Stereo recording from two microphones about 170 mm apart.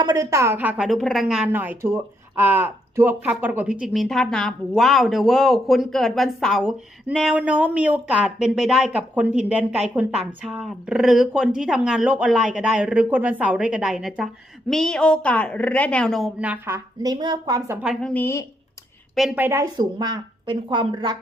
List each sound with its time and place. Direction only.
0.0 s a woman's voice: 20° right (ahead or behind)
17.8 s a woman's voice: 5° left (ahead or behind)
19.1 s a woman's voice: centre (ahead or behind)
19.4 s a woman's voice: 15° right (ahead or behind)